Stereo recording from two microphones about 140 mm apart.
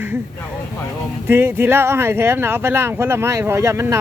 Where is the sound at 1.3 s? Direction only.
15° right (ahead or behind).